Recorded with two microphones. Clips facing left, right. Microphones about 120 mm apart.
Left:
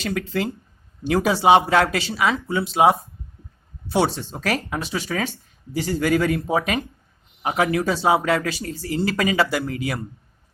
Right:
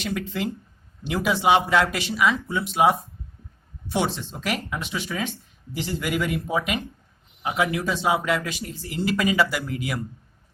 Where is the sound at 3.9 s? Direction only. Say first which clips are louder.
Left 4 dB; 40° left (ahead or behind).